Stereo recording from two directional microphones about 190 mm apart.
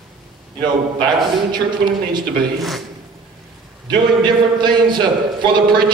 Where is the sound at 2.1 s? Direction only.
25° right (ahead or behind).